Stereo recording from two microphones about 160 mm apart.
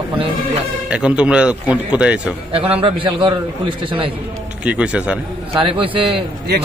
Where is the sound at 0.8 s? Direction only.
5° right (ahead or behind).